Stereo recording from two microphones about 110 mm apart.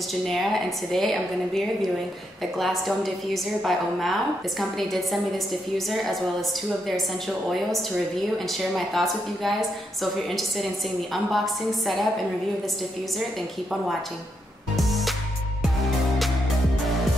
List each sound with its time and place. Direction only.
0.3 s a woman's voice: centre (ahead or behind)
11.3 s a woman's voice: centre (ahead or behind)
14.8 s music: centre (ahead or behind)